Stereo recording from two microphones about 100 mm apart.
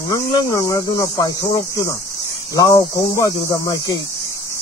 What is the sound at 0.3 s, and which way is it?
Speech, 35° left (ahead or behind).